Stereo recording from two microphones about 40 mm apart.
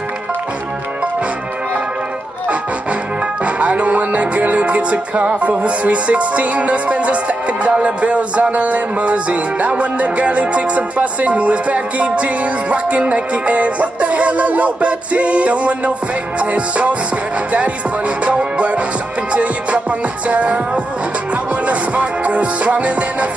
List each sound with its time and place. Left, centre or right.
3.4 s music: right